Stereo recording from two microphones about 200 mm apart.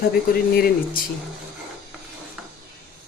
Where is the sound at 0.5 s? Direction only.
50° left (ahead or behind).